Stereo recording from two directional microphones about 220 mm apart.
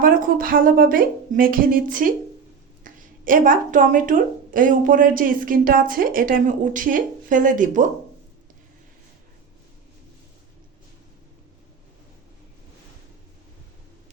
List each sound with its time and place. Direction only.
0.0 s a woman's voice: 40° right (ahead or behind)